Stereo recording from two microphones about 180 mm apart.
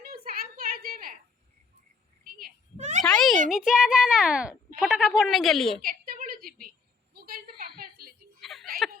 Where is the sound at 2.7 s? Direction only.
40° right (ahead or behind).